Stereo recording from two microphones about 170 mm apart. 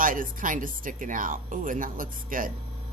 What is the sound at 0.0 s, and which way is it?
Speech, 55° right (ahead or behind).